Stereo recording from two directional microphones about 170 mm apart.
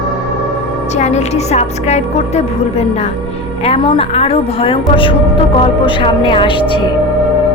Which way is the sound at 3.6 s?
35° left (ahead or behind).